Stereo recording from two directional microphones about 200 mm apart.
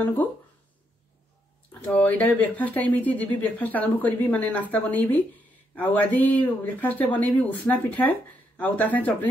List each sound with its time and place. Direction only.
0.0 s speech: 10° left (ahead or behind)
1.7 s speech: 5° left (ahead or behind)